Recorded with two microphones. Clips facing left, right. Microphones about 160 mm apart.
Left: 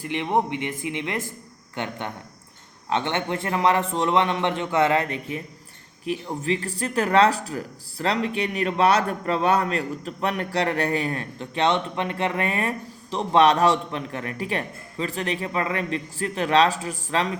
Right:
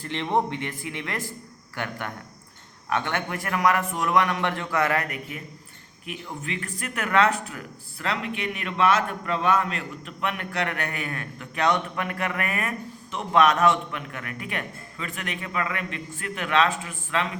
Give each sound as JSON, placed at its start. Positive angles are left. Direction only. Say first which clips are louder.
{"t": 0.0, "sound": "a man's voice", "louder": "left 2 dB", "side_deg": 15}